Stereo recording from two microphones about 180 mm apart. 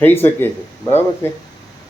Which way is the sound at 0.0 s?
10° left (ahead or behind).